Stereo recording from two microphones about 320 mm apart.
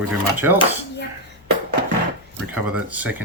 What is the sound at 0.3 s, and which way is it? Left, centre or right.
Speech, centre.